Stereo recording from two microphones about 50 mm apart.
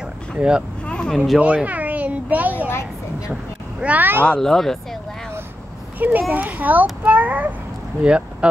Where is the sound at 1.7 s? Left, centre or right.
Right.